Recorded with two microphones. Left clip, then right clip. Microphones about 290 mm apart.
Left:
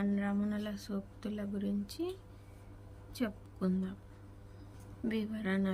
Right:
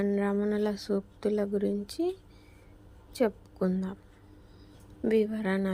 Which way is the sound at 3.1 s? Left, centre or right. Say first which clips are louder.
Right 11 dB; centre.